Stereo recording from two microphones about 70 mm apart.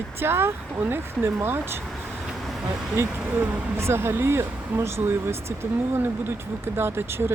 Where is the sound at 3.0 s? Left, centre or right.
Right.